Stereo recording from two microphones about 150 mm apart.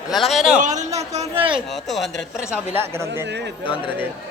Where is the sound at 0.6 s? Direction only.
55° right (ahead or behind); by 1.6 s 35° right (ahead or behind).